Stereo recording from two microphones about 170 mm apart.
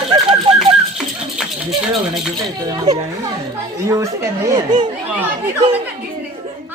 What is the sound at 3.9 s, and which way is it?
Speech, 20° right (ahead or behind).